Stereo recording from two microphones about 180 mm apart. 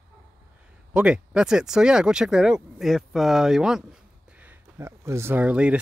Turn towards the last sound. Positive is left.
turn(degrees=-5)  # may be behind; listen again after turning